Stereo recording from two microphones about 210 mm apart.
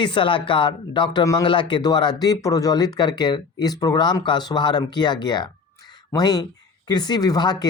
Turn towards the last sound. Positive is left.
turn(degrees=20)  # may be behind; listen again after turning